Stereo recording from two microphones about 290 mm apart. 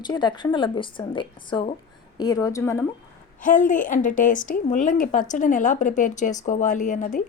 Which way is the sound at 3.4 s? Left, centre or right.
Left.